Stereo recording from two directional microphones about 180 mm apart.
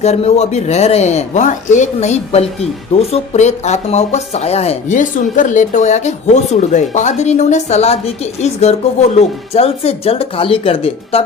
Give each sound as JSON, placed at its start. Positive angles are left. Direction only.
{"t": 0.0, "sound": "speech", "side_deg": 35}